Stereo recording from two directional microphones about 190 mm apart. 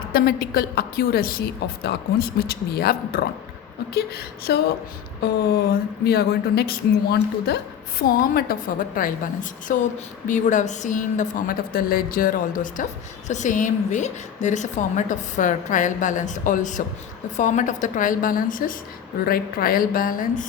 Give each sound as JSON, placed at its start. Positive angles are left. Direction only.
{"t": 0.1, "sound": "a woman's voice", "side_deg": 55}
{"t": 6.1, "sound": "a woman's voice", "side_deg": 55}